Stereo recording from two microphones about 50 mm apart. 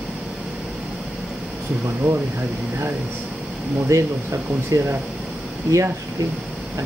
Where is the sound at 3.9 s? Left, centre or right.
Right.